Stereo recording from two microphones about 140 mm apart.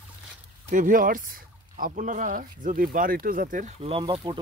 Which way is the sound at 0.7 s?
70° right (ahead or behind).